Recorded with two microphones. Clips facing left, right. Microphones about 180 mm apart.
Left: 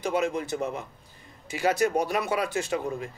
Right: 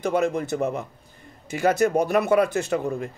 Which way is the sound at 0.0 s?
55° right (ahead or behind).